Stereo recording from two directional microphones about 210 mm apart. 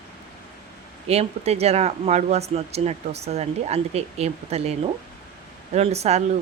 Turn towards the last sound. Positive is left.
turn(degrees=-30)  # may be behind; listen again after turning